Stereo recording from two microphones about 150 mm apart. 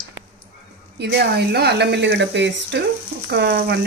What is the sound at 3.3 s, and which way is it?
Speech, 90° right.